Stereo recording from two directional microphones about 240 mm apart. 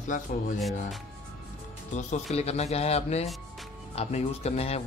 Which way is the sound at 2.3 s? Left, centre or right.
Left.